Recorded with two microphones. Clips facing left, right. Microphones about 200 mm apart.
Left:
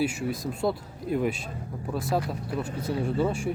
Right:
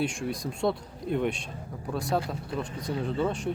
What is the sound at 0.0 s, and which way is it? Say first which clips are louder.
Speech: left 2 dB; 5° left (ahead or behind).